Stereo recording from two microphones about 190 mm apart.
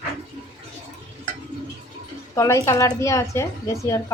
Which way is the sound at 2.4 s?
15° left (ahead or behind).